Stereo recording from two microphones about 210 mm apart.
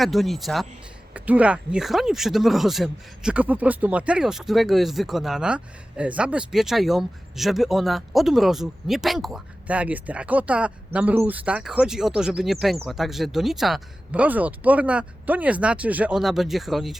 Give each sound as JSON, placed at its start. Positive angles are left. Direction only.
{"t": 0.0, "sound": "speech", "side_deg": 0}